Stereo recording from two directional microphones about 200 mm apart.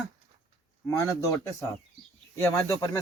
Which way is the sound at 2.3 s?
15° left (ahead or behind).